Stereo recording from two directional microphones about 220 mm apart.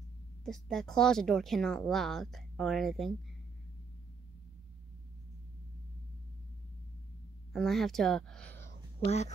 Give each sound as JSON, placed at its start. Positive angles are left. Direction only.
{"t": 0.5, "sound": "speech", "side_deg": 0}
{"t": 7.5, "sound": "speech", "side_deg": 0}
{"t": 9.0, "sound": "speech", "side_deg": 30}